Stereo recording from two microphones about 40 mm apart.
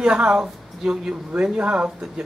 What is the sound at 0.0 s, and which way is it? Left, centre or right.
A woman's voice, right.